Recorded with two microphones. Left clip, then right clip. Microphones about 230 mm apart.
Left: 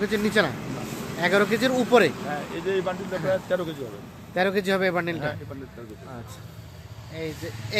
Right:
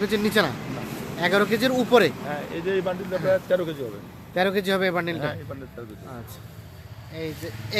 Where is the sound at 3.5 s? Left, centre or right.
Right.